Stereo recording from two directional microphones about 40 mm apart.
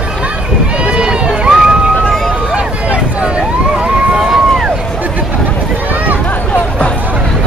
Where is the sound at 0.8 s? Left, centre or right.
Centre.